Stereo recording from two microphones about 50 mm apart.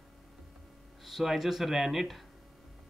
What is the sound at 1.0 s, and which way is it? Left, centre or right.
Speech, centre.